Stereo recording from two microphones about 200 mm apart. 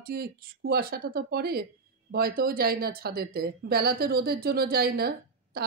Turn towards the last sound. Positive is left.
turn(degrees=-50)  # may be behind; listen again after turning